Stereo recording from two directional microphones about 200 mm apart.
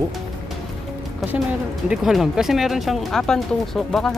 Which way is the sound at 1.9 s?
Centre (ahead or behind).